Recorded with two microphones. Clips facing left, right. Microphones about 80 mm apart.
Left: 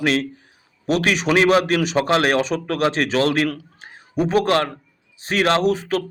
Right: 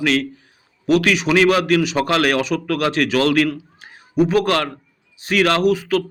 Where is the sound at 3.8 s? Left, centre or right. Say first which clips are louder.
Right 5 dB; left.